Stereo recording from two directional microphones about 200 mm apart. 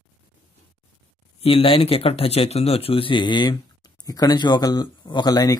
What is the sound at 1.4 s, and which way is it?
Speech, 25° left (ahead or behind).